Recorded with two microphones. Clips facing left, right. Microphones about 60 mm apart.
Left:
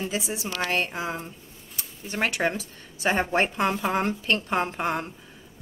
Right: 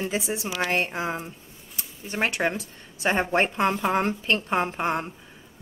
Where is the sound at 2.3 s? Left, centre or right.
Centre.